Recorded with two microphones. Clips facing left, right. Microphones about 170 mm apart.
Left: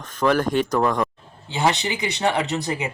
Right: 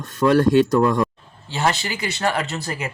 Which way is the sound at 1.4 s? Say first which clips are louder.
Left 1 dB; 15° left (ahead or behind).